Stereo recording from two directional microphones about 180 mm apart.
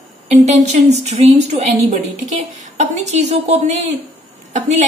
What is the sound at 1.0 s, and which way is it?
A woman's voice, 40° right (ahead or behind).